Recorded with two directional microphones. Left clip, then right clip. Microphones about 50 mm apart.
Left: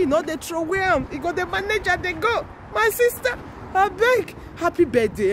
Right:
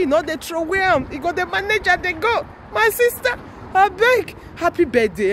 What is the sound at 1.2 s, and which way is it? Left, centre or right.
Speech, left.